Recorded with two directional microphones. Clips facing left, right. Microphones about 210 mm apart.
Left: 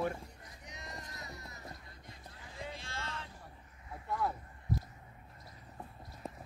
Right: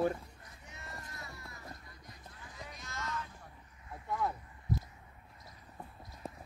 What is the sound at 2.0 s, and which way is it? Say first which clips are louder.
Run: even; 30° left (ahead or behind).